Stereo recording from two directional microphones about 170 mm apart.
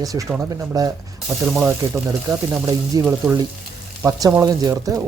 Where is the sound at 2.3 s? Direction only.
20° right (ahead or behind).